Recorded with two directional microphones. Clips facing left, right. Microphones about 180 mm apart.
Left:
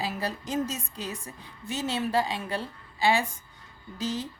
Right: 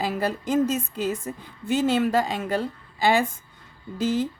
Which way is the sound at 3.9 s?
55° right (ahead or behind).